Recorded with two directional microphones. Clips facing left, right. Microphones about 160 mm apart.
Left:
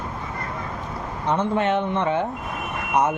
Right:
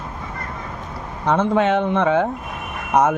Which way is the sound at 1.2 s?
90° right.